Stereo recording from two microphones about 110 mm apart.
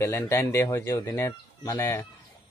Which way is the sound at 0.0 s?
25° left (ahead or behind).